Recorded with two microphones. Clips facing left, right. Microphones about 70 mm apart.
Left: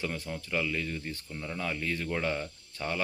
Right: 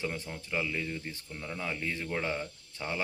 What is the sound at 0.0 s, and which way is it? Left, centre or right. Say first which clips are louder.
Speech: left 1 dB; centre.